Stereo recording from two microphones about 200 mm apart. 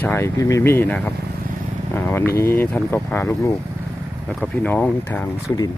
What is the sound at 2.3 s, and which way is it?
Speech, 15° left (ahead or behind).